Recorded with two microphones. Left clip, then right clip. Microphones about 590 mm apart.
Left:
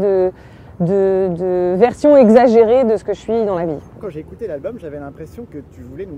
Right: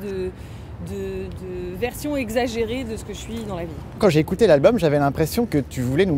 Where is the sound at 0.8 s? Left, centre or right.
Left.